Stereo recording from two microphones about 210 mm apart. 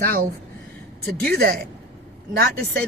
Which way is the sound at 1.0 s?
45° right (ahead or behind).